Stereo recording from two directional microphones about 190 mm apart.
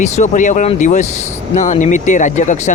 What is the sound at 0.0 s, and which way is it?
Speech, 40° left (ahead or behind).